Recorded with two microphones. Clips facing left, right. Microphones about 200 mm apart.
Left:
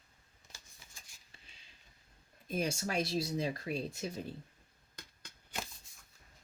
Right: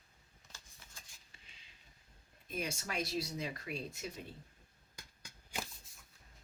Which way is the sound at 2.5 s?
30° left (ahead or behind).